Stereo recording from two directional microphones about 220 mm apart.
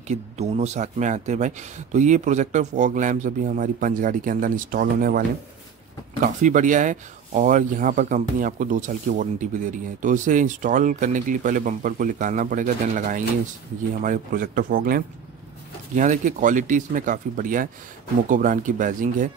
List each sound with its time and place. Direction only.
0.1 s speech: 30° right (ahead or behind)
6.2 s speech: 35° right (ahead or behind)